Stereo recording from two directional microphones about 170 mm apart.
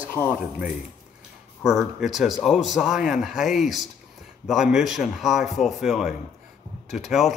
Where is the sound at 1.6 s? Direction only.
Centre (ahead or behind).